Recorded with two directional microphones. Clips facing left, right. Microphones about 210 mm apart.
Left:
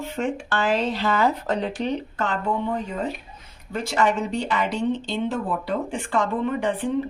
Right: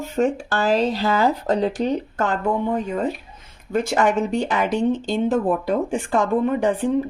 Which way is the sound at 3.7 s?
50° right (ahead or behind).